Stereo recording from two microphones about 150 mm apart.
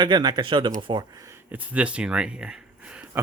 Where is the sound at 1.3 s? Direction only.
10° right (ahead or behind).